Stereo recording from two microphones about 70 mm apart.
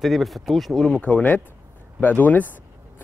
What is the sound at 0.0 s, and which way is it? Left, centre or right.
Speech, centre.